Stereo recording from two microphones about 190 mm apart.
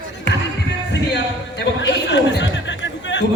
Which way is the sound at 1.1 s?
65° left (ahead or behind).